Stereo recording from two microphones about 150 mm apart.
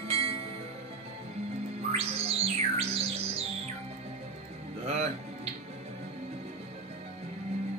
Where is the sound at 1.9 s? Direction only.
40° right (ahead or behind).